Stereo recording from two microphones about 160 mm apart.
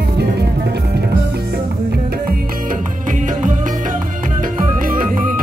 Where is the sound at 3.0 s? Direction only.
55° right (ahead or behind).